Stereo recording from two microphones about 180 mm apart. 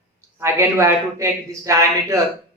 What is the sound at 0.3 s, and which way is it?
A man's voice, 15° right (ahead or behind).